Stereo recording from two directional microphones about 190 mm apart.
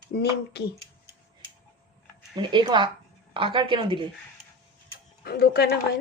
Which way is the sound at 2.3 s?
25° right (ahead or behind).